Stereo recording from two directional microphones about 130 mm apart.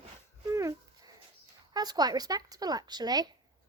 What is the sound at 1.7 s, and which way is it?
Speech, 30° right (ahead or behind).